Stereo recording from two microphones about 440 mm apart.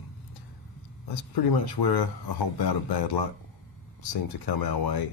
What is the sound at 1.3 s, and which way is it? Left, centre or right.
Speech, left.